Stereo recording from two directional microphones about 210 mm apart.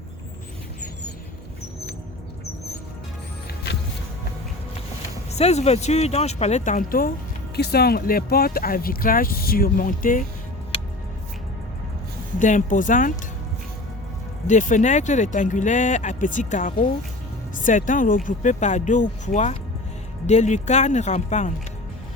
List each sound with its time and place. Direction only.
5.3 s speech: 30° left (ahead or behind)
12.4 s speech: 40° left (ahead or behind)
14.4 s speech: 35° left (ahead or behind)